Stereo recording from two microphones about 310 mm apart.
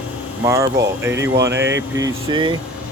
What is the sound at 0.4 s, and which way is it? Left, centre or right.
Speech, centre.